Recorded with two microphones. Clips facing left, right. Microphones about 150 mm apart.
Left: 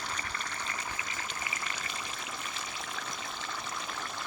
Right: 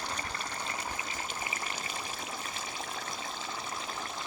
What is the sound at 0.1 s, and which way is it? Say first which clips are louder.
Stream: right 2 dB; 30° right (ahead or behind).